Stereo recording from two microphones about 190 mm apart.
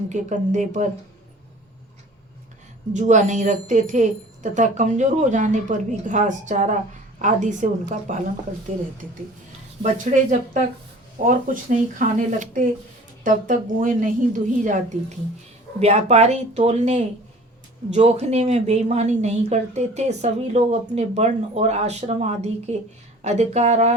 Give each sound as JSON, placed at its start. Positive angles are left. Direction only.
{"t": 0.1, "sound": "a woman's voice", "side_deg": -40}
{"t": 2.9, "sound": "a woman's voice", "side_deg": -40}
{"t": 9.8, "sound": "a woman's voice", "side_deg": -40}